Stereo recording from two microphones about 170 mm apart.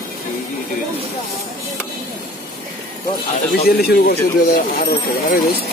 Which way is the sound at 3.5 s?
65° left (ahead or behind).